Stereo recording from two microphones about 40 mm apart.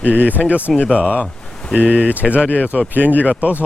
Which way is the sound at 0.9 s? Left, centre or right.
Right.